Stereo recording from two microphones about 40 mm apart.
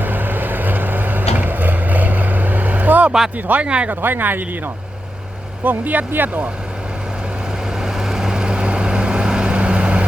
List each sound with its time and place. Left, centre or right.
0.0 s vehicle: right
3.3 s speech: right
3.6 s speech: right
3.8 s speech: right
5.6 s speech: right
7.8 s vehicle: centre; by 10.1 s right